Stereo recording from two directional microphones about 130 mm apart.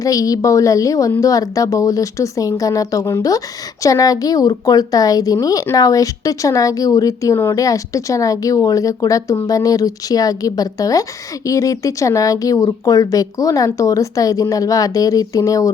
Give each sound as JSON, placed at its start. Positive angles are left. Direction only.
{"t": 0.0, "sound": "a woman's voice", "side_deg": 25}